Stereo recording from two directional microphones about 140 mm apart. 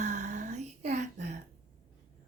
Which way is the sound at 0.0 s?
55° right (ahead or behind).